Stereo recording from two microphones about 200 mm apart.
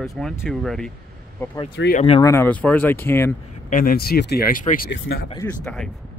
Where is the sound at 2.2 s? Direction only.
10° left (ahead or behind).